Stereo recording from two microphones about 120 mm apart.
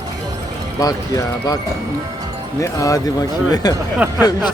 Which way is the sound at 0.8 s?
30° left (ahead or behind).